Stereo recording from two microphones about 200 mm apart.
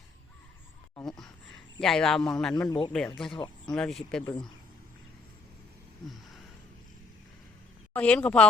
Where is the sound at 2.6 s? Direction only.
20° left (ahead or behind).